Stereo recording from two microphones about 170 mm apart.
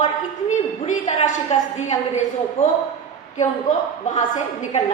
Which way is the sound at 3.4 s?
45° left (ahead or behind).